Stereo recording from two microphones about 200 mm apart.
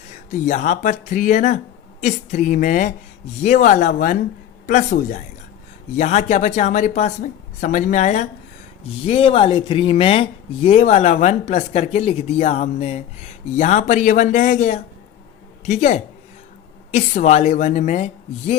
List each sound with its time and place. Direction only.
0.1 s speech: 40° left (ahead or behind)